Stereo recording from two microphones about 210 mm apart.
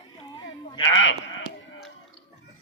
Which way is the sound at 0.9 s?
60° left (ahead or behind).